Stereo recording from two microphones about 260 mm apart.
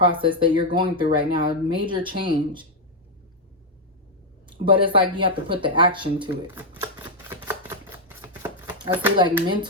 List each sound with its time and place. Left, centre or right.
0.0 s speech: centre
4.6 s speech: centre
6.6 s shuffling cards: centre